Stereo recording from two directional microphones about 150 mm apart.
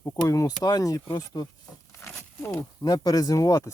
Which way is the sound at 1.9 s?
15° left (ahead or behind).